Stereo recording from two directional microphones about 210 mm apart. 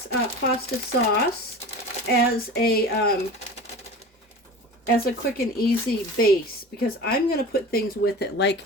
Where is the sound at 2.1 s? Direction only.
50° left (ahead or behind).